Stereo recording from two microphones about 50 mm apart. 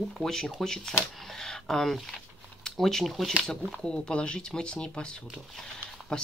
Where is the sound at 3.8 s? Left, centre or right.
Centre.